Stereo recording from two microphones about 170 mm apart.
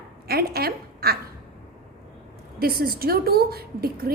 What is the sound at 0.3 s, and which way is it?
Speech, 65° right (ahead or behind).